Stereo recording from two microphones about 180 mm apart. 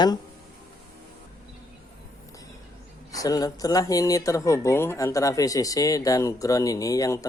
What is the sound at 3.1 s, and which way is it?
Speech, 20° left (ahead or behind).